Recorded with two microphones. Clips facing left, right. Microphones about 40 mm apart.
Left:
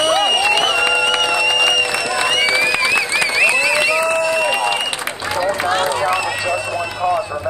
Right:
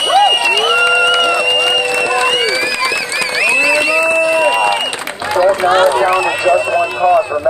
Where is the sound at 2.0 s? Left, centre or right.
Right.